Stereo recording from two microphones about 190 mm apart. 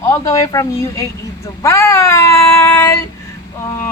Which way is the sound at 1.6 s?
15° left (ahead or behind).